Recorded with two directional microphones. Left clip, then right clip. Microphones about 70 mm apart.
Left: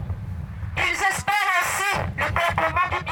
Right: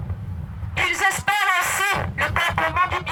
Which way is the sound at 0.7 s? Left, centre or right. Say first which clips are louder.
Right 2 dB; right.